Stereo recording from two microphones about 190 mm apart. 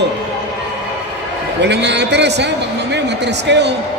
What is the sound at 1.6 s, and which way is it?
A man's voice, 65° right (ahead or behind).